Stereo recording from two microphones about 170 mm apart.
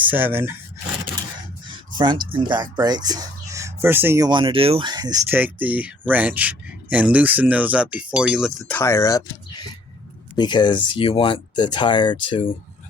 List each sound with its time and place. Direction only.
0.1 s speech: 10° right (ahead or behind)
2.3 s speech: 30° right (ahead or behind)
4.3 s speech: 30° right (ahead or behind)
5.3 s speech: 10° right (ahead or behind)
8.7 s speech: 15° left (ahead or behind)
10.3 s speech: 25° left (ahead or behind)